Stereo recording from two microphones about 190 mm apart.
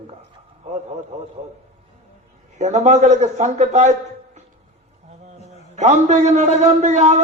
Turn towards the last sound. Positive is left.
turn(degrees=-35)  # may be behind; listen again after turning